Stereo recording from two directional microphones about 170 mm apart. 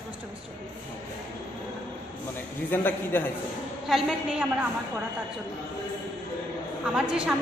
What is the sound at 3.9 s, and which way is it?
Speech, centre (ahead or behind).